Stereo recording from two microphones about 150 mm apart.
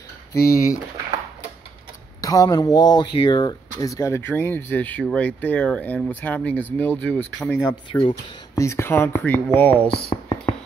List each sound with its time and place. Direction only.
0.3 s speech: 20° left (ahead or behind)
2.2 s speech: 25° left (ahead or behind)
7.7 s speech: 30° left (ahead or behind)
8.6 s speech: 15° left (ahead or behind)